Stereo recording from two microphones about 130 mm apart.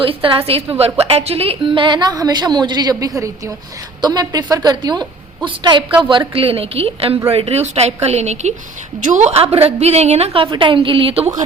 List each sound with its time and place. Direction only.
0.0 s a woman's voice: 40° right (ahead or behind)
4.0 s a woman's voice: 30° right (ahead or behind)